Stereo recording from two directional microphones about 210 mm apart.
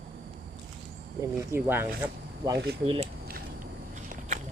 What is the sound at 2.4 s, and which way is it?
Speech, 20° right (ahead or behind).